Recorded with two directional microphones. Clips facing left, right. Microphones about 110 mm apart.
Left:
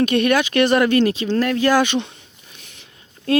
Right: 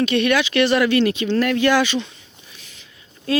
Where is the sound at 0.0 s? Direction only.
45° left (ahead or behind).